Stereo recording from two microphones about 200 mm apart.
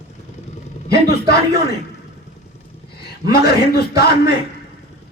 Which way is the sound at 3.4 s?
50° left (ahead or behind).